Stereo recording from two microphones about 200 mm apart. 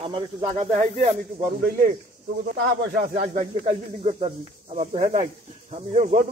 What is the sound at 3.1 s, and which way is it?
Speech, 30° right (ahead or behind).